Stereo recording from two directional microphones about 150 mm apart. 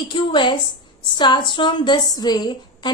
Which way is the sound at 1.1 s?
30° left (ahead or behind).